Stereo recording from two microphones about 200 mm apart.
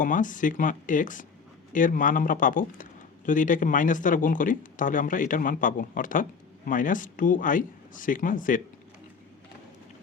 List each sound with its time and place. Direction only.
0.0 s speech: 40° left (ahead or behind)